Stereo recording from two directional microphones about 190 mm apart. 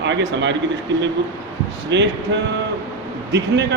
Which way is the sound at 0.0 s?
70° right (ahead or behind).